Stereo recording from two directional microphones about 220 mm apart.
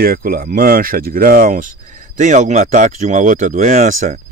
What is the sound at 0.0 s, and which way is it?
Speech, 40° right (ahead or behind).